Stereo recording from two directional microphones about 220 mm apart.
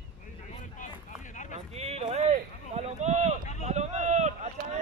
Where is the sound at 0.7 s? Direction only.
35° left (ahead or behind).